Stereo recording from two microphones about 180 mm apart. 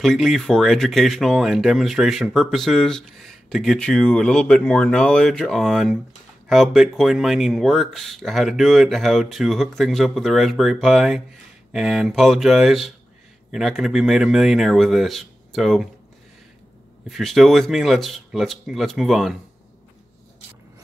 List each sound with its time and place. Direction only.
0.0 s speech: centre (ahead or behind)
17.1 s speech: centre (ahead or behind)